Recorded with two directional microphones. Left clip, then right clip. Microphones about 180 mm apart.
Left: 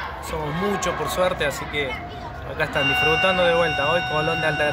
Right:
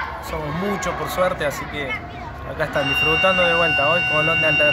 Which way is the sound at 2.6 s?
25° left (ahead or behind).